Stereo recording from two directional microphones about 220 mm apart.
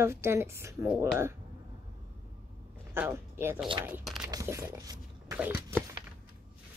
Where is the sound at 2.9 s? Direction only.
10° right (ahead or behind).